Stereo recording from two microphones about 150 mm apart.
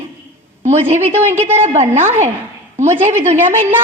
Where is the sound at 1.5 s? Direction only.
50° right (ahead or behind).